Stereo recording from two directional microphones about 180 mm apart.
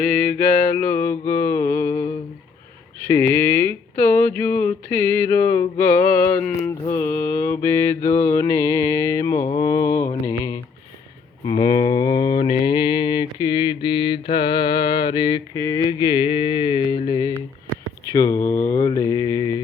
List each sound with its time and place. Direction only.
0.0 s mantra: 5° left (ahead or behind)
0.7 s music: 10° left (ahead or behind)
3.1 s music: 15° left (ahead or behind)
6.9 s mantra: 10° left (ahead or behind)
10.2 s a sound: 20° left (ahead or behind)
12.6 s mantra: 25° left (ahead or behind)
18.1 s music: 15° left (ahead or behind)
18.6 s mantra: 20° left (ahead or behind)